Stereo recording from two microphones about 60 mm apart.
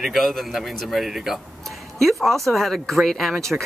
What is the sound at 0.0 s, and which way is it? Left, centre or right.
Speech, centre.